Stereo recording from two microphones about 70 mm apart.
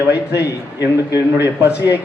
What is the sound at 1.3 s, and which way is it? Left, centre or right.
Speech, right.